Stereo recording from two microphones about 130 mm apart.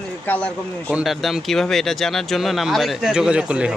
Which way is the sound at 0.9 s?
Centre (ahead or behind).